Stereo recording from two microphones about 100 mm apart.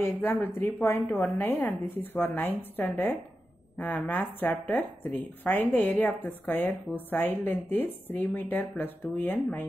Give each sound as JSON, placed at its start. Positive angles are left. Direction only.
{"t": 0.0, "sound": "a woman's voice", "side_deg": 20}
{"t": 1.0, "sound": "a woman's voice", "side_deg": 0}
{"t": 1.4, "sound": "a woman's voice", "side_deg": 20}
{"t": 3.7, "sound": "a woman's voice", "side_deg": 15}